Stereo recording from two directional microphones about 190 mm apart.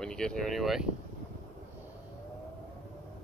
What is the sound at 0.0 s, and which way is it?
Speech, 5° left (ahead or behind).